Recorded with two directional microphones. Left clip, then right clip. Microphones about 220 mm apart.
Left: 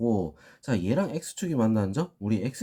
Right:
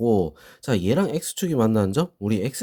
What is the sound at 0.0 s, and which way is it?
Speech, 50° right (ahead or behind).